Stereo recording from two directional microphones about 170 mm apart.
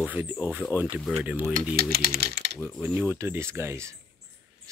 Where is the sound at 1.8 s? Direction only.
65° right (ahead or behind).